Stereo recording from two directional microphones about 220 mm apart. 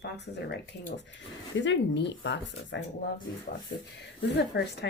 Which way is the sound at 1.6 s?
55° left (ahead or behind).